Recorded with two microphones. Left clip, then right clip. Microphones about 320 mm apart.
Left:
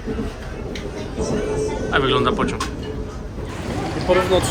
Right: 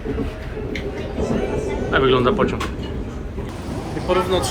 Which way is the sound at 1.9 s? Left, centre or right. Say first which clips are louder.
Right 2 dB; centre.